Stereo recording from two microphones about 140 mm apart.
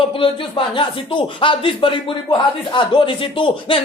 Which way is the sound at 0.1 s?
40° left (ahead or behind).